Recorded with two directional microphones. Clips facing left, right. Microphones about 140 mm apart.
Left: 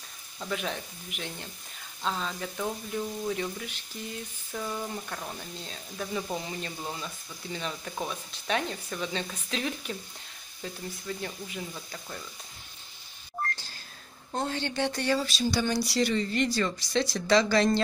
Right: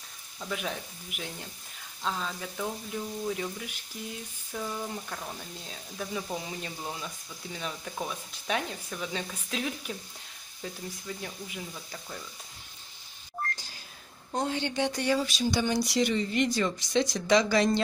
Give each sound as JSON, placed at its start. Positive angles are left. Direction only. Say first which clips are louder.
{"t": 0.4, "sound": "speech", "louder": "left 1 dB", "side_deg": -5}
{"t": 14.3, "sound": "speech", "louder": "right 1 dB", "side_deg": -15}